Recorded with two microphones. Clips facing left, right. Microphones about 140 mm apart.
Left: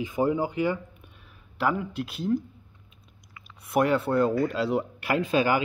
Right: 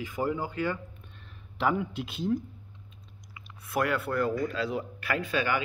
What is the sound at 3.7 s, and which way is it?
Speech, 20° left (ahead or behind).